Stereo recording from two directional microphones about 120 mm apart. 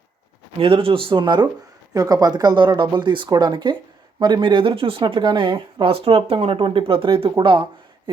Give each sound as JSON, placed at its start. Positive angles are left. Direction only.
{"t": 0.6, "sound": "speech", "side_deg": -50}